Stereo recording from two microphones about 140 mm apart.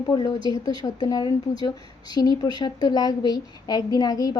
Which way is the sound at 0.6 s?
25° left (ahead or behind).